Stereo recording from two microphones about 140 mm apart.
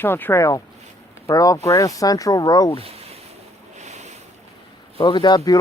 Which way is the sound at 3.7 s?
55° right (ahead or behind).